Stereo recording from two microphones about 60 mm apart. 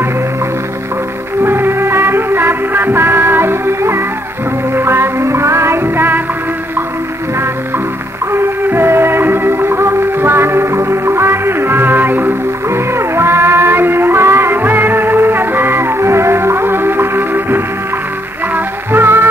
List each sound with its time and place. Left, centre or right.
1.4 s music: right
8.3 s music: right
12.6 s music: right